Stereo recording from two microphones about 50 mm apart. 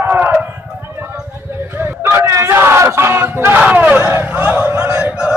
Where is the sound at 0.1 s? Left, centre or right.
Right.